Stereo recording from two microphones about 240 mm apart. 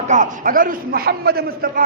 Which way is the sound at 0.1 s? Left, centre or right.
Right.